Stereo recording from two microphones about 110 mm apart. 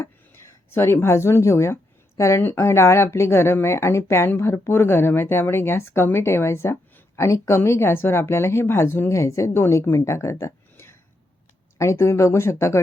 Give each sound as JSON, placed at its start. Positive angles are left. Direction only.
{"t": 0.7, "sound": "speech", "side_deg": 20}